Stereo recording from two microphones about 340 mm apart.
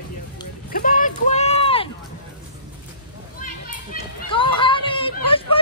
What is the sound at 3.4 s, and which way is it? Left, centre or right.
Children playing, centre.